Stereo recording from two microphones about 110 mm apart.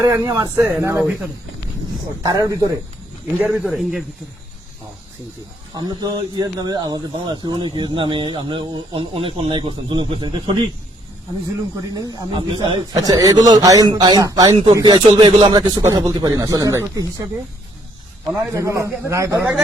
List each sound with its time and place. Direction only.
0.0 s a man's voice: 30° right (ahead or behind)
2.2 s a man's voice: 35° right (ahead or behind)
3.5 s a man's voice: 5° right (ahead or behind)
5.7 s a man's voice: 40° right (ahead or behind)
12.3 s speech: 50° right (ahead or behind)
12.9 s a man's voice: 35° right (ahead or behind)
15.8 s a man's voice: 30° right (ahead or behind)
18.5 s a man's voice: 25° right (ahead or behind)